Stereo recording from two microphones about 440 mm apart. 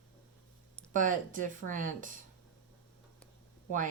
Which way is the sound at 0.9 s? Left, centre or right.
Centre.